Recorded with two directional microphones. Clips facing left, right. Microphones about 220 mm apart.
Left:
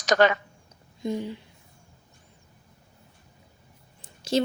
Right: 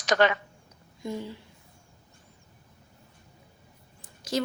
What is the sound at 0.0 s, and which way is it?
Speech, 40° left (ahead or behind).